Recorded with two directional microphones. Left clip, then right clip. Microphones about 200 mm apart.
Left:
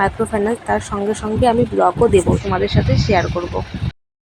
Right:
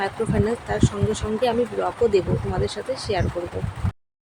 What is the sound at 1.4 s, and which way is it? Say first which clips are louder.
Speech: left 9 dB; 15° left (ahead or behind).